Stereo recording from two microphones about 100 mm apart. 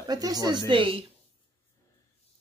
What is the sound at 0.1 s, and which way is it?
Speech, 40° right (ahead or behind).